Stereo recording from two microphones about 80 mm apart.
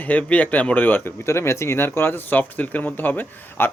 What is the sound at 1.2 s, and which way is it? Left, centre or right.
Speech, left.